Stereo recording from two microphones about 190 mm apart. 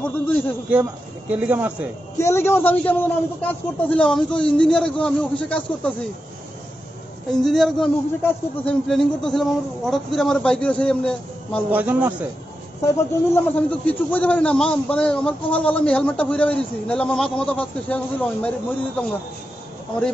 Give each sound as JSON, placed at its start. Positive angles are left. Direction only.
{"t": 0.0, "sound": "a man's voice", "side_deg": 10}
{"t": 1.3, "sound": "a man's voice", "side_deg": -10}
{"t": 2.1, "sound": "speech", "side_deg": 15}
{"t": 7.2, "sound": "speech", "side_deg": 0}
{"t": 11.7, "sound": "a man's voice", "side_deg": -10}
{"t": 12.8, "sound": "a man's voice", "side_deg": 15}